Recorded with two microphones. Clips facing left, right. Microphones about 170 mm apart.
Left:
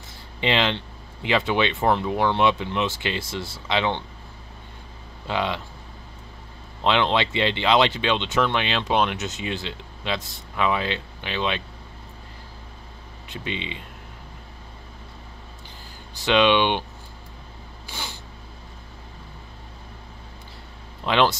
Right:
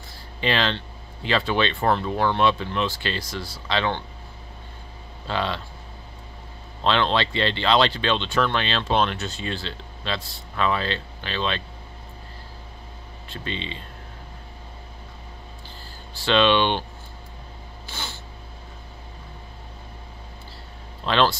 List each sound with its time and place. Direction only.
0.4 s speech: 20° left (ahead or behind)
5.2 s speech: 15° left (ahead or behind)
6.8 s speech: 15° left (ahead or behind)
13.3 s speech: 15° left (ahead or behind)
16.2 s speech: 15° left (ahead or behind)
17.8 s a sound: 10° left (ahead or behind)
21.0 s speech: 15° left (ahead or behind)